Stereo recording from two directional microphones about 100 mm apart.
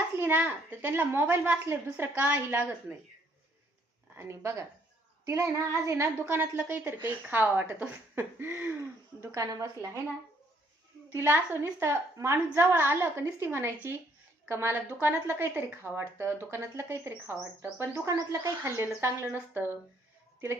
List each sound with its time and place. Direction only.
0.2 s speech: 20° right (ahead or behind)
4.2 s speech: 25° right (ahead or behind)
5.2 s female singing: 30° right (ahead or behind)
6.2 s speech: 20° right (ahead or behind)
9.2 s female singing: 35° right (ahead or behind)
11.1 s speech: 25° right (ahead or behind)